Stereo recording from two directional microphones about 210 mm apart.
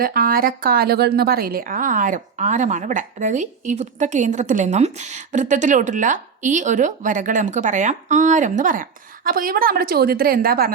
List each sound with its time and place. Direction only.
0.0 s a woman's voice: 45° right (ahead or behind)